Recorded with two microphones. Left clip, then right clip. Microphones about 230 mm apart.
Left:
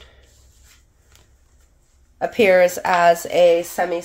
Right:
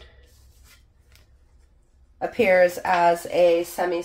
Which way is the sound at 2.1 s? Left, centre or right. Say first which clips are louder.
Left 4 dB; left.